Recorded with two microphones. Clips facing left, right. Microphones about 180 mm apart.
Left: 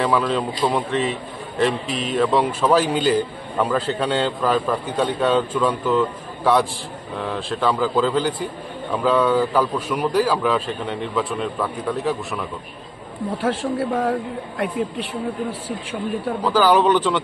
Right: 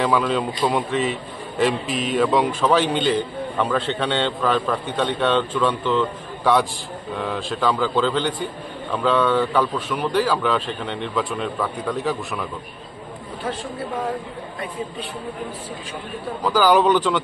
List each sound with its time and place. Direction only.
0.0 s a man's voice: centre (ahead or behind)
13.4 s speech: 90° left
16.4 s a man's voice: centre (ahead or behind)